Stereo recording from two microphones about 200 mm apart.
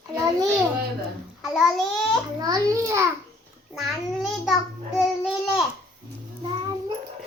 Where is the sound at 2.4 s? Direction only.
15° right (ahead or behind).